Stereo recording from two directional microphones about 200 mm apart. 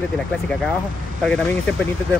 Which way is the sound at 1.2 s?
5° left (ahead or behind).